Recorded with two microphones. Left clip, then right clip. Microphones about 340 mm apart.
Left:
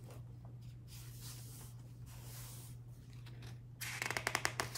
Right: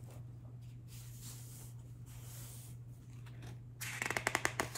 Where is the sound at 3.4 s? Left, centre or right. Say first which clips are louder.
Right 1 dB; centre.